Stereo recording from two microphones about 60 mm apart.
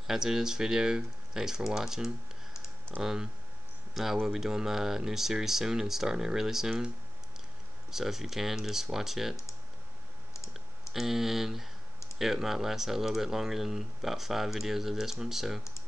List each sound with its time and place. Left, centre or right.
0.0 s speech: centre
7.9 s speech: centre
10.3 s clicking: left
10.9 s speech: centre